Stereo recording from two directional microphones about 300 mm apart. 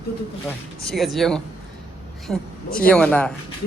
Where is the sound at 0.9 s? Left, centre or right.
Centre.